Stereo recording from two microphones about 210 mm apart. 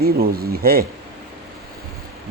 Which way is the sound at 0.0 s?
45° right (ahead or behind).